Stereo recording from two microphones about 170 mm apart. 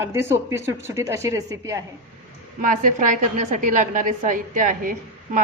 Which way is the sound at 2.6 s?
50° right (ahead or behind).